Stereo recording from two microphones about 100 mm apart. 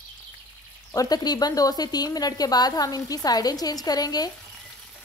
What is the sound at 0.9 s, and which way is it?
Speech, 40° left (ahead or behind).